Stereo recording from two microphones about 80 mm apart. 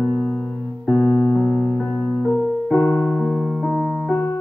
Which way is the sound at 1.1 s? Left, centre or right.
Left.